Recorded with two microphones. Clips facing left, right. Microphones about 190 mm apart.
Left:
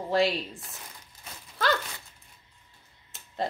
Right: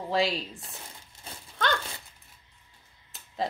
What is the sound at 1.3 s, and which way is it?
Dog, 30° right (ahead or behind).